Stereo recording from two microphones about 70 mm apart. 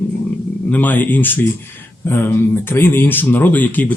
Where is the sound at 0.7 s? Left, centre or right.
Left.